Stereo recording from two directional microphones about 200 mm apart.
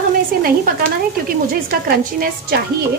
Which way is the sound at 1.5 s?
45° right (ahead or behind).